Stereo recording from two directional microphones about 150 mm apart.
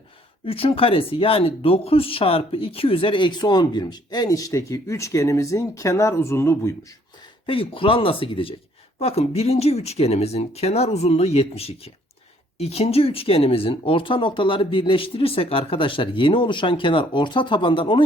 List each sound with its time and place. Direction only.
0.4 s speech: 40° left (ahead or behind); by 6.7 s 20° left (ahead or behind)
7.4 s speech: 35° left (ahead or behind)